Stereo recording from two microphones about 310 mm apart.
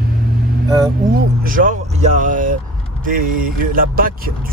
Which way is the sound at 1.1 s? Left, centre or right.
Right.